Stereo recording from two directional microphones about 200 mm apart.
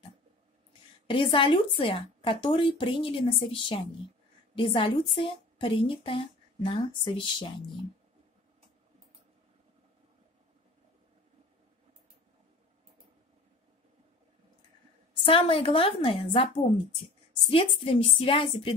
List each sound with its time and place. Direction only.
1.0 s speech: 25° left (ahead or behind)
15.2 s speech: 30° left (ahead or behind)